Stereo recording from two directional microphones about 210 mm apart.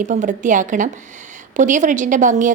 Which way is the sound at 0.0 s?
35° right (ahead or behind).